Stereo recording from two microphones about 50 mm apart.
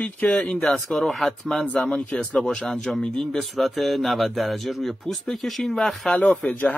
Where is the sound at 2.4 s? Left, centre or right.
Centre.